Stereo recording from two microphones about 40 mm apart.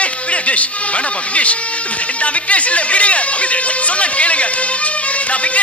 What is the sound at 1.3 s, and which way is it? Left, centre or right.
Speech, left.